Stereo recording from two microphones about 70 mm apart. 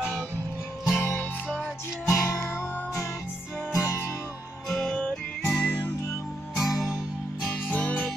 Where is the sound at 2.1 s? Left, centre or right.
Left.